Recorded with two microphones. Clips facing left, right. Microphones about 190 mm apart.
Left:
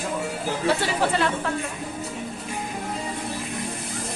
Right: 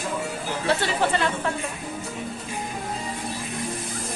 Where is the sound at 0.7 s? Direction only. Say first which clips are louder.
Even; 10° left (ahead or behind).